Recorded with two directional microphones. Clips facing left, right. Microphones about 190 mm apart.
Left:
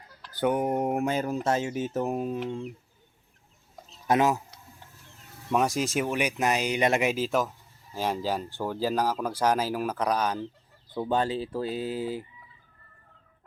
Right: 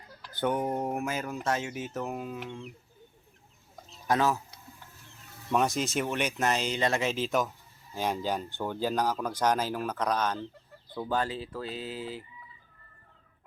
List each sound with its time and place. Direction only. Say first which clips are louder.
0.4 s speech: left 4 dB; 10° left (ahead or behind)
0.9 s speech: left 6 dB; 30° left (ahead or behind)
4.0 s speech: left 3 dB; 20° left (ahead or behind)
5.5 s speech: left 2 dB; 10° left (ahead or behind)
10.9 s speech: left 4 dB; 25° left (ahead or behind)